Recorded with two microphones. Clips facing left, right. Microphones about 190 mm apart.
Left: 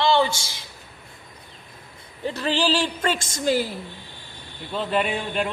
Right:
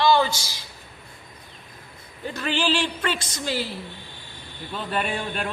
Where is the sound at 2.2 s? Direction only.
35° left (ahead or behind).